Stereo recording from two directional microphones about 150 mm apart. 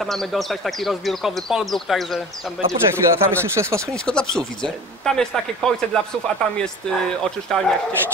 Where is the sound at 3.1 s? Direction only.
15° right (ahead or behind).